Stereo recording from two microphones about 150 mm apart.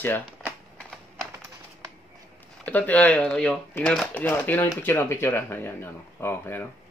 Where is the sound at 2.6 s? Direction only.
10° left (ahead or behind).